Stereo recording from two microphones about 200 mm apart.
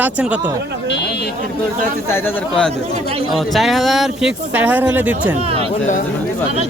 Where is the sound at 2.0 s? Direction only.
10° left (ahead or behind); by 5.4 s 10° right (ahead or behind).